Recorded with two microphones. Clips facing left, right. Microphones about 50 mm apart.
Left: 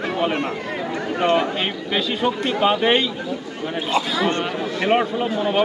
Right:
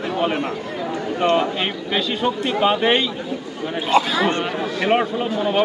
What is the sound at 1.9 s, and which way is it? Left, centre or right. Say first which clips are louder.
A man's voice: even; centre.